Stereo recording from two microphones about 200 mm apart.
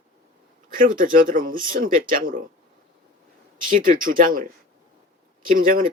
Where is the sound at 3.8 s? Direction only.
45° right (ahead or behind).